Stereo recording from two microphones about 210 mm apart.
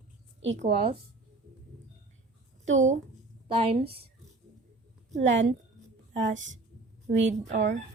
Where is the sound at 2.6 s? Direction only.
35° right (ahead or behind).